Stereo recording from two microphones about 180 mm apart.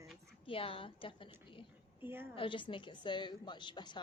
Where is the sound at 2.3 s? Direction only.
30° left (ahead or behind).